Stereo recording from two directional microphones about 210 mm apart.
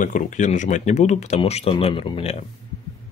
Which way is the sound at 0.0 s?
40° left (ahead or behind).